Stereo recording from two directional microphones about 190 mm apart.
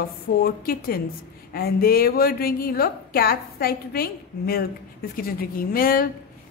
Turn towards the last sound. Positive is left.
turn(degrees=50)  # may be behind; listen again after turning